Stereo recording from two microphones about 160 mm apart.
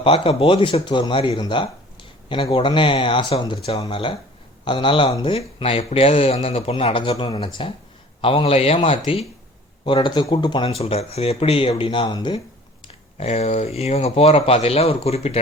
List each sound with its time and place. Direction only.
0.0 s speech: 35° left (ahead or behind)
12.9 s speech: 40° left (ahead or behind)